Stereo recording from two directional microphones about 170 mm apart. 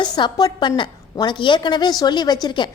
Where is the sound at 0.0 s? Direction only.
25° left (ahead or behind).